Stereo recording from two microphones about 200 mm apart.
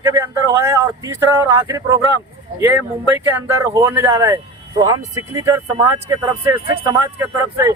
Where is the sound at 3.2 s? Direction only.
15° right (ahead or behind).